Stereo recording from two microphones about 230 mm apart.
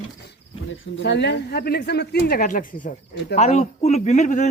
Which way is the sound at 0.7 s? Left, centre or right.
Left.